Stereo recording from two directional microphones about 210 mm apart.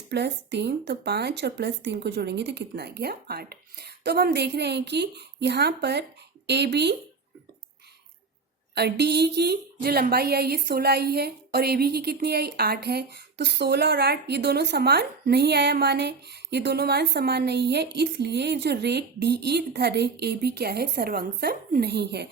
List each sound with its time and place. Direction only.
0.1 s a woman's voice: 50° right (ahead or behind)
8.7 s a woman's voice: 50° right (ahead or behind)